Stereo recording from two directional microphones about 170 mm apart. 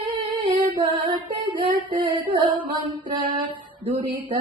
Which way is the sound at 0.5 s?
25° right (ahead or behind).